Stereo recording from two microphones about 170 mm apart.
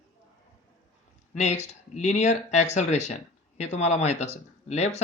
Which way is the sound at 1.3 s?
45° left (ahead or behind).